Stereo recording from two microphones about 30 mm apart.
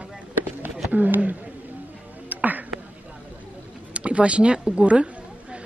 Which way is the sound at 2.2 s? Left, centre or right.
Right.